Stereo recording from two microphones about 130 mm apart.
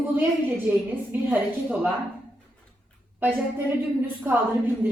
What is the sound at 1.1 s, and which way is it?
Speech, 15° right (ahead or behind).